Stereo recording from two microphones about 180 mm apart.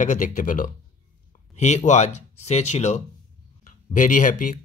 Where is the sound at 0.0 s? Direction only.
45° left (ahead or behind).